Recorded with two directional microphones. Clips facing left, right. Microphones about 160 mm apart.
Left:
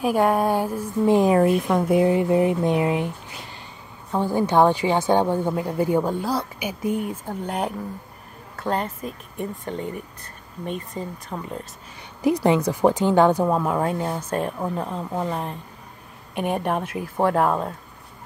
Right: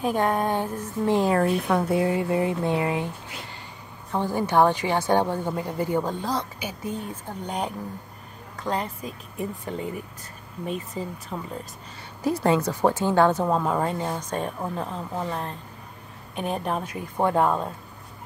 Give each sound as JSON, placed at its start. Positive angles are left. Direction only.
{"t": 0.0, "sound": "a woman's voice", "side_deg": 10}
{"t": 2.0, "sound": "speech", "side_deg": 20}
{"t": 4.1, "sound": "a woman's voice", "side_deg": 15}
{"t": 12.2, "sound": "a woman's voice", "side_deg": 15}